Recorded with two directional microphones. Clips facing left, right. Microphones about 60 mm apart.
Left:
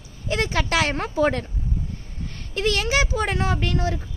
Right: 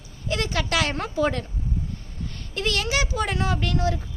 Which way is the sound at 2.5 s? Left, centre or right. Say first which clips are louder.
Left 3 dB; left.